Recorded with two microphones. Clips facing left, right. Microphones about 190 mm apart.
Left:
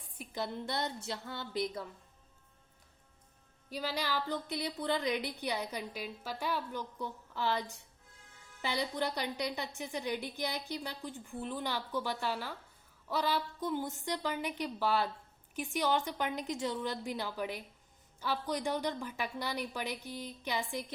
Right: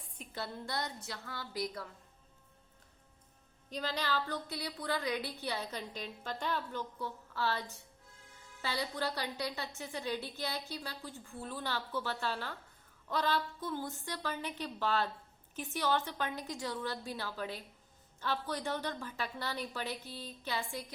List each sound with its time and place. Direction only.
0.2 s a woman's voice: 15° left (ahead or behind)
3.7 s a woman's voice: 10° left (ahead or behind)
8.6 s a woman's voice: 20° left (ahead or behind)